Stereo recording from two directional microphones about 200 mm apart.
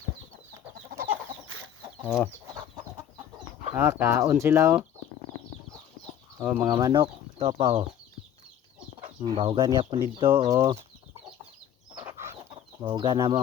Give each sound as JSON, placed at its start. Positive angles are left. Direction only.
{"t": 1.5, "sound": "chicken", "side_deg": -85}
{"t": 2.0, "sound": "chicken", "side_deg": -5}
{"t": 3.8, "sound": "speech", "side_deg": -10}
{"t": 6.4, "sound": "speech", "side_deg": -10}
{"t": 6.7, "sound": "speech", "side_deg": -20}
{"t": 9.0, "sound": "speech", "side_deg": -25}
{"t": 10.5, "sound": "speech", "side_deg": -15}
{"t": 12.5, "sound": "speech", "side_deg": -20}